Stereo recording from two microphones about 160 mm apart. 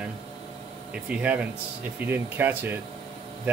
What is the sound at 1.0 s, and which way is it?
Speech, 10° right (ahead or behind).